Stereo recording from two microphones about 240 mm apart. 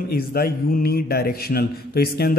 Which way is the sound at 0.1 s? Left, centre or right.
Left.